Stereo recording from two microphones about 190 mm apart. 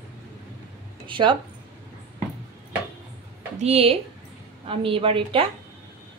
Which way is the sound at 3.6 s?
35° right (ahead or behind).